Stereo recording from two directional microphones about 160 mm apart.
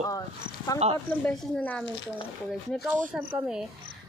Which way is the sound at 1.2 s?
5° left (ahead or behind).